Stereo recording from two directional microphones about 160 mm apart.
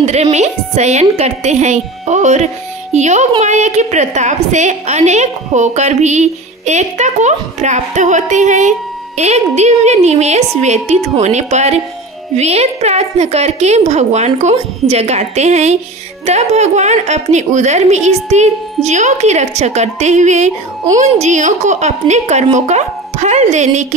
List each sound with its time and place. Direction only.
0.0 s a woman's voice: 45° right (ahead or behind)